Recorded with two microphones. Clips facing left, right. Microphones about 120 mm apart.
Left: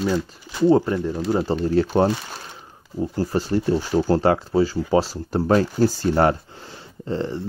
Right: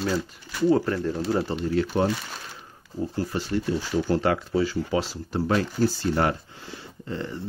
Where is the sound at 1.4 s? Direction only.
35° left (ahead or behind).